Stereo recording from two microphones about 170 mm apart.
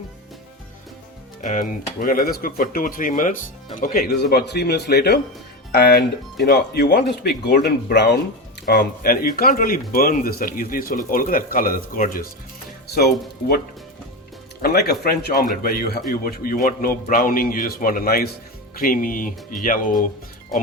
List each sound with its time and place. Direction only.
1.4 s speech: 50° left (ahead or behind)
12.9 s speech: 70° left (ahead or behind)
14.6 s speech: 65° left (ahead or behind)